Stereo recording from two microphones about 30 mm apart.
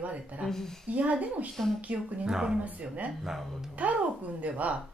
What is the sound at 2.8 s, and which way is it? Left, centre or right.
Speech, right.